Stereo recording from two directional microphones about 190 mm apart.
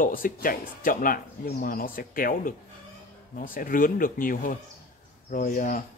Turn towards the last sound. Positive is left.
turn(degrees=45)  # may be behind; listen again after turning